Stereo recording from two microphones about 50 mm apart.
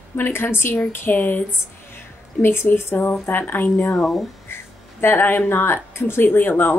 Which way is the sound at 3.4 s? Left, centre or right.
Left.